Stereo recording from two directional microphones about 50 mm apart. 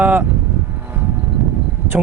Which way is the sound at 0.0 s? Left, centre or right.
Right.